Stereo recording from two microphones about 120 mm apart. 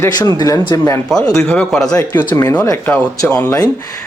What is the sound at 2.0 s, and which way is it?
Speech, 20° left (ahead or behind).